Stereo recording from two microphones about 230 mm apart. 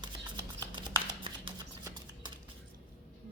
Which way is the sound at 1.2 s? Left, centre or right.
Centre.